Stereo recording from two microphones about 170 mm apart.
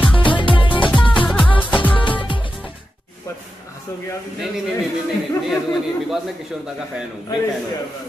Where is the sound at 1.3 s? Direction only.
5° left (ahead or behind).